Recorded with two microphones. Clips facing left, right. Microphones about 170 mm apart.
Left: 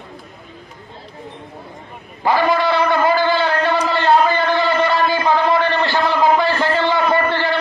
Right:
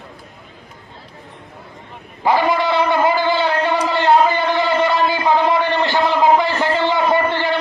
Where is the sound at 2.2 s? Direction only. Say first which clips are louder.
Even; 20° right (ahead or behind).